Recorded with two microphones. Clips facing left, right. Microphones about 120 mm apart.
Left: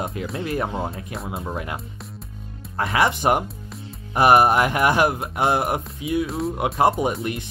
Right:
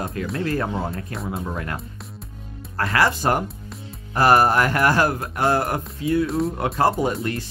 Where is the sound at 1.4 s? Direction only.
15° left (ahead or behind).